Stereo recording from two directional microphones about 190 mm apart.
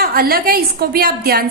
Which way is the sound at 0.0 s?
50° right (ahead or behind).